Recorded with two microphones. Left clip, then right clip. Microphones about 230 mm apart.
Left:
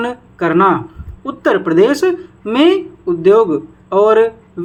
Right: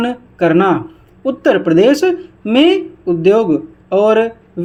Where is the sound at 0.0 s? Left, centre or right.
Right.